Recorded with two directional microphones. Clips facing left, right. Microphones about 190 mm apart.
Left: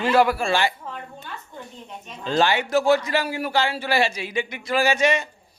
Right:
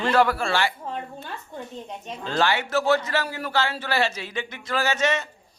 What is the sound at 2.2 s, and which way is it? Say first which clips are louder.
A man's voice: left 3 dB; 15° left (ahead or behind).